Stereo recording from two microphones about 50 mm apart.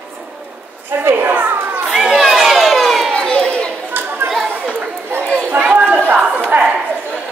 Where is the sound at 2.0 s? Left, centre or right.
Centre.